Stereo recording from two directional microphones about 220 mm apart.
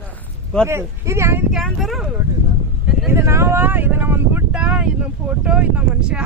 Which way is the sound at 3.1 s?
10° right (ahead or behind).